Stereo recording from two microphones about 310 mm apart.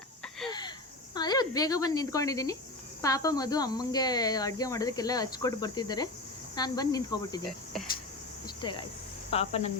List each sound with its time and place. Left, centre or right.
1.1 s speech: centre
8.4 s speech: centre